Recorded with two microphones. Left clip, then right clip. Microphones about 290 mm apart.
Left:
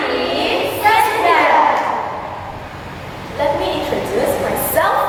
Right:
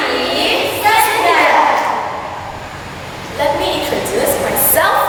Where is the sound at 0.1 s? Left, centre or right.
Centre.